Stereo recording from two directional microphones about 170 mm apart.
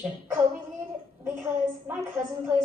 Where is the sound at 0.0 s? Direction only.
15° right (ahead or behind).